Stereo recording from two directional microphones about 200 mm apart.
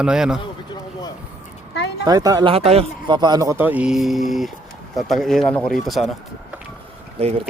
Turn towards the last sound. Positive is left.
turn(degrees=-30)  # may be behind; listen again after turning